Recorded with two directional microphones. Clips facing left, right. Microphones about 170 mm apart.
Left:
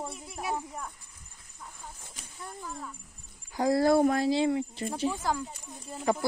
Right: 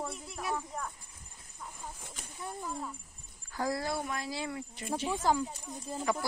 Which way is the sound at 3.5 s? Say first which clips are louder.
Left 7 dB; 20° left (ahead or behind).